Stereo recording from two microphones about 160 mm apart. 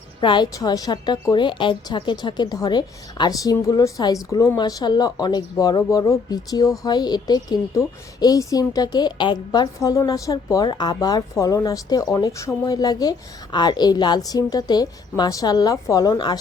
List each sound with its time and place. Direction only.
0.2 s a woman's voice: 30° left (ahead or behind)